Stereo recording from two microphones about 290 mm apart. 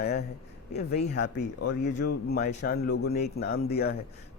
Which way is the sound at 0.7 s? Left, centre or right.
Left.